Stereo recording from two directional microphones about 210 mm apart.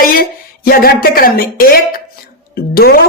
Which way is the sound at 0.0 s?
40° left (ahead or behind).